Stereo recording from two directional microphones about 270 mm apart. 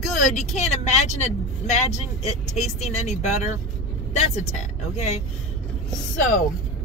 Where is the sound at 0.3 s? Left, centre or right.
Left.